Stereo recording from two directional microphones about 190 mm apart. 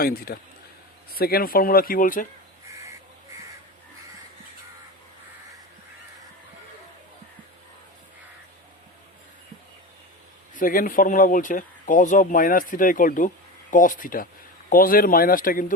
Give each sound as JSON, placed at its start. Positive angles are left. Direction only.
{"t": 0.0, "sound": "speech", "side_deg": 50}
{"t": 10.5, "sound": "speech", "side_deg": 45}